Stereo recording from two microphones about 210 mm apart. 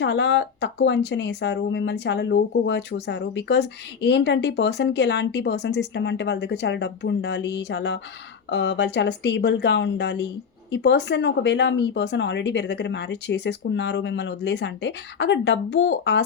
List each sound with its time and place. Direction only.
0.0 s speech: 55° left (ahead or behind)